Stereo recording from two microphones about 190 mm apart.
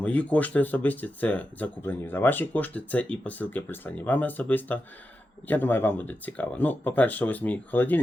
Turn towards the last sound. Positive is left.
turn(degrees=10)  # may be behind; listen again after turning